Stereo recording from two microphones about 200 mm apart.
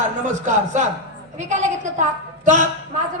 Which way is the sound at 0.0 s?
40° right (ahead or behind).